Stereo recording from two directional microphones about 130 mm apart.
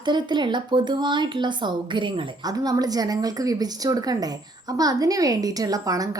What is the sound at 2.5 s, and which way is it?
Speech, 30° right (ahead or behind).